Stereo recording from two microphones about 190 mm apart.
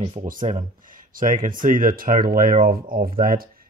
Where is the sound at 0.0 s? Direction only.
30° right (ahead or behind).